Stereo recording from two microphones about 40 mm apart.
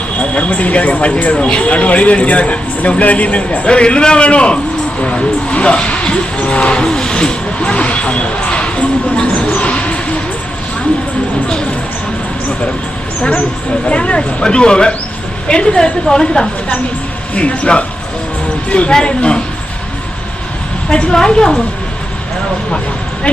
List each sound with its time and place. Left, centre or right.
0.2 s a man's voice: left
6.8 s speech: centre
9.6 s vehicle: left
13.8 s a man's voice: left
17.3 s speech: left
18.9 s a man's voice: left
20.9 s a man's voice: left